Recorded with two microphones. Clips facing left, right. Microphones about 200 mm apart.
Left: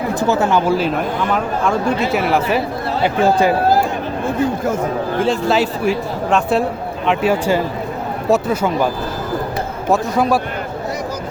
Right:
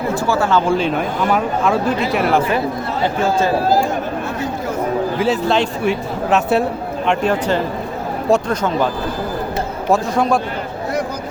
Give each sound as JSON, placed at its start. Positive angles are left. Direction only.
{"t": 0.1, "sound": "speech", "side_deg": 20}
{"t": 0.6, "sound": "speech", "side_deg": 5}
{"t": 3.0, "sound": "speech", "side_deg": 15}
{"t": 5.1, "sound": "speech", "side_deg": -5}
{"t": 9.9, "sound": "speech", "side_deg": 5}